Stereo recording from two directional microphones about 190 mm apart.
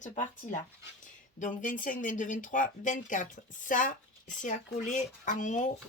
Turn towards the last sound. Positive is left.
turn(degrees=40)  # may be behind; listen again after turning